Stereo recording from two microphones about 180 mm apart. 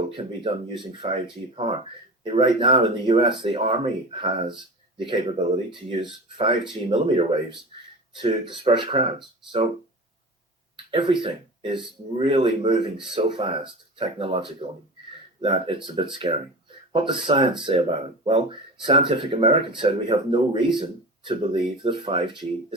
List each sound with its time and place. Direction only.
0.1 s speech: 30° right (ahead or behind)
10.9 s speech: 30° right (ahead or behind)